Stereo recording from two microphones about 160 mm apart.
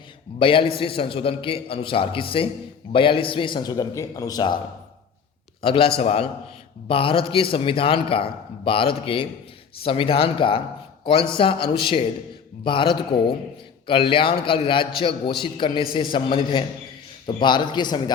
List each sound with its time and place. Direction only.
0.3 s a man's voice: 35° left (ahead or behind)
5.6 s a man's voice: 35° left (ahead or behind)